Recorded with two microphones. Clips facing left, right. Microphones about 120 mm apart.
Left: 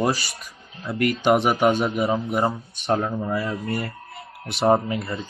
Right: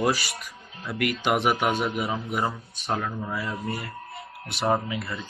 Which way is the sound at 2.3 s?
30° left (ahead or behind).